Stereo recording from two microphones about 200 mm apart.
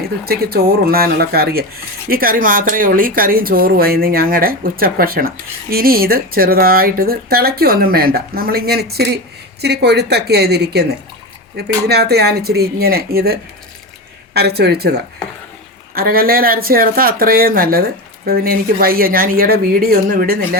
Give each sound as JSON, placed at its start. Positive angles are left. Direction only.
{"t": 0.3, "sound": "speech", "side_deg": -50}